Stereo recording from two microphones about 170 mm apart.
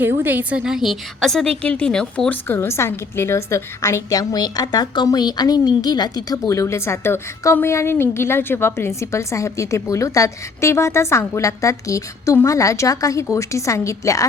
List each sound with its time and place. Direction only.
0.0 s a woman's voice: 10° right (ahead or behind); by 14.3 s 20° left (ahead or behind)